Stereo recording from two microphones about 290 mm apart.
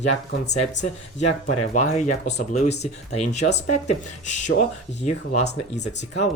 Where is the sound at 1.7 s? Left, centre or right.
Left.